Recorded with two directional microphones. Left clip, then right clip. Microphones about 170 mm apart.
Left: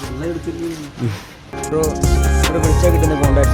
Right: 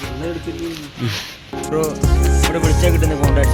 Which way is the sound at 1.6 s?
Centre (ahead or behind).